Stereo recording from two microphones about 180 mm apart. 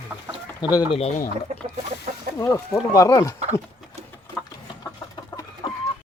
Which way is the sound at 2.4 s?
15° left (ahead or behind).